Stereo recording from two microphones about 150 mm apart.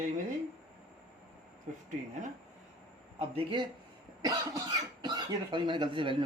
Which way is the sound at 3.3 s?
30° right (ahead or behind).